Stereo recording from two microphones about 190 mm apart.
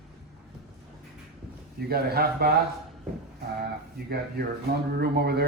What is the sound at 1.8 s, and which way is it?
Speech, 55° right (ahead or behind).